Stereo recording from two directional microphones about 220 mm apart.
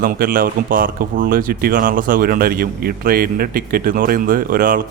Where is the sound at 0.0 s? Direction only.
40° right (ahead or behind).